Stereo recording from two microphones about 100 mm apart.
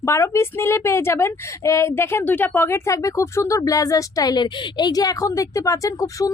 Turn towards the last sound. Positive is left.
turn(degrees=35)  # may be behind; listen again after turning